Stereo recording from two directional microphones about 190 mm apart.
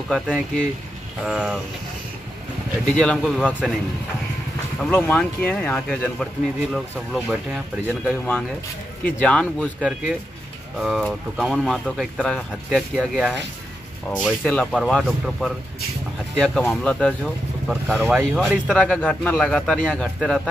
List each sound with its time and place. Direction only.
0.1 s speech: 5° left (ahead or behind)
2.9 s speech: 5° left (ahead or behind)